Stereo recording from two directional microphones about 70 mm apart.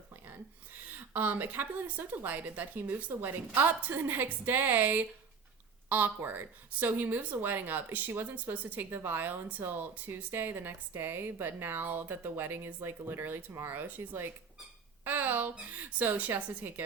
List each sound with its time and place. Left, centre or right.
0.1 s a woman's voice: right
13.8 s speech: right